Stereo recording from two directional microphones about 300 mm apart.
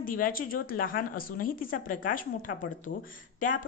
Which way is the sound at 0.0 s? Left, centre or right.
Left.